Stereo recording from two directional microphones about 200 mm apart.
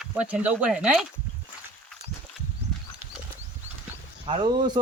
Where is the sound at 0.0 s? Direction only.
5° right (ahead or behind).